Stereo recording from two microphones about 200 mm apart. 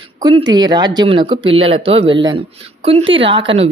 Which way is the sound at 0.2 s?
20° right (ahead or behind).